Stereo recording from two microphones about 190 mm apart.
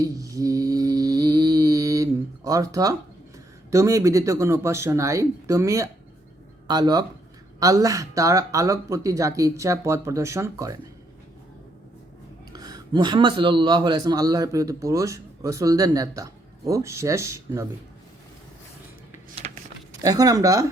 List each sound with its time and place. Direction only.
0.0 s mantra: 20° right (ahead or behind)
3.7 s a man's voice: 15° right (ahead or behind)
12.5 s a man's voice: 20° right (ahead or behind)
19.4 s keys jangling: 40° right (ahead or behind)
20.0 s speech: 20° right (ahead or behind)